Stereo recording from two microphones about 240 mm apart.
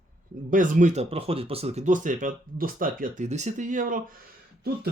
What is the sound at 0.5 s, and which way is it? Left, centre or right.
Speech, right.